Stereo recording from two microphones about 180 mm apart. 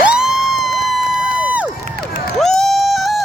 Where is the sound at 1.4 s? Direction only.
5° right (ahead or behind).